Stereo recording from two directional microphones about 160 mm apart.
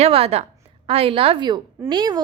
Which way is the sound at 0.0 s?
40° right (ahead or behind).